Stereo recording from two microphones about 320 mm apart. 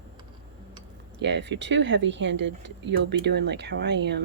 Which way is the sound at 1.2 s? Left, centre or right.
Right.